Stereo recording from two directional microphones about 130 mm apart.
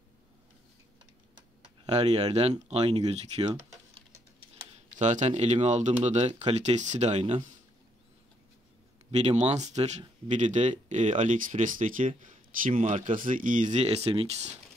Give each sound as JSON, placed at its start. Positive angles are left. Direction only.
{"t": 1.9, "sound": "speech", "side_deg": -55}
{"t": 4.9, "sound": "speech", "side_deg": -65}
{"t": 9.1, "sound": "speech", "side_deg": -60}